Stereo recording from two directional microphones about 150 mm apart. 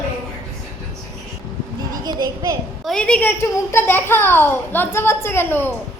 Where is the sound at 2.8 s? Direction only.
5° left (ahead or behind).